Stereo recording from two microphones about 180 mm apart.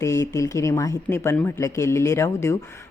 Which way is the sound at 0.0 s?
15° left (ahead or behind).